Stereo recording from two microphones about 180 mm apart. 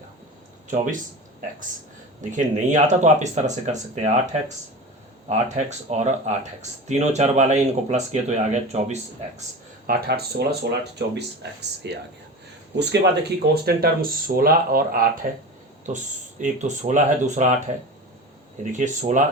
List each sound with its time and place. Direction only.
2.3 s speech: 45° right (ahead or behind)
9.8 s speech: 60° right (ahead or behind); by 17.5 s 40° right (ahead or behind)
18.7 s speech: 45° right (ahead or behind)